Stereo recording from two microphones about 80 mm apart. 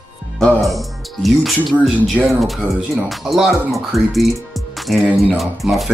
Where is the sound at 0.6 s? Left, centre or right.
Centre.